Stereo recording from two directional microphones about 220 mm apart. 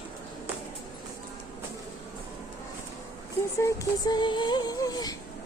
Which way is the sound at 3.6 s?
15° left (ahead or behind).